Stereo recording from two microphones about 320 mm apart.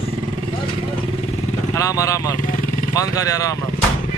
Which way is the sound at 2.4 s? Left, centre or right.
Left.